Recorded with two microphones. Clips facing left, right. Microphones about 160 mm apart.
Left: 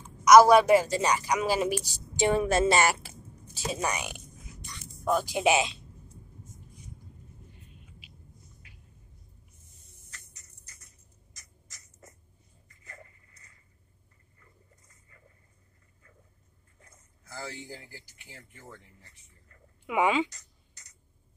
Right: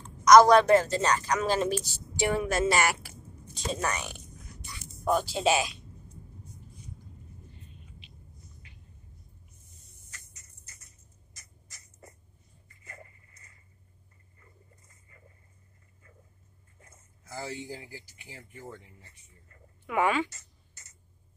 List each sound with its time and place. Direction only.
0.0 s a woman's voice: 10° left (ahead or behind)
2.1 s a woman's voice: 25° left (ahead or behind)
3.5 s a woman's voice: 10° left (ahead or behind)
4.6 s a sound: 5° right (ahead or behind)
5.2 s a woman's voice: 15° left (ahead or behind)
8.0 s a sound: 5° left (ahead or behind)
17.3 s speech: 20° right (ahead or behind)
19.9 s a woman's voice: 20° left (ahead or behind)
20.2 s a sound: 5° right (ahead or behind)